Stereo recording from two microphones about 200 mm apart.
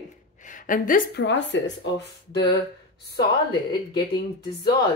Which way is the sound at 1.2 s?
60° left (ahead or behind).